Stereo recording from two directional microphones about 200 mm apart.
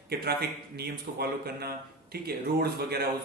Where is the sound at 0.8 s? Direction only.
50° right (ahead or behind).